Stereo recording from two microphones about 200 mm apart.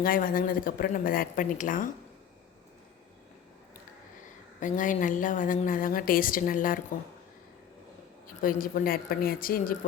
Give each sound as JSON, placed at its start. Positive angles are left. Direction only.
{"t": 0.0, "sound": "a woman's voice", "side_deg": 45}
{"t": 4.6, "sound": "a woman's voice", "side_deg": 40}
{"t": 8.4, "sound": "a woman's voice", "side_deg": 45}